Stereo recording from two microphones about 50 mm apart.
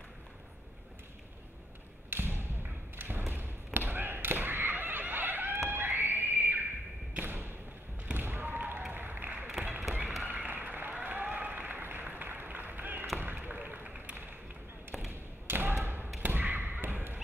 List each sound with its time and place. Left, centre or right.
2.0 s basketball bounce: right
5.7 s music: right
7.2 s a sound: right
10.2 s applause: right
13.2 s a sound: right
15.0 s thump: right